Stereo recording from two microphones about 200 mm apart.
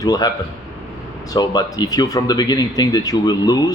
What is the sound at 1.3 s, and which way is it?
Speech, 20° left (ahead or behind).